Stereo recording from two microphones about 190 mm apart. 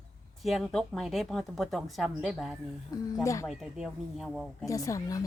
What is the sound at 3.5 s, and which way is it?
Speech, centre (ahead or behind).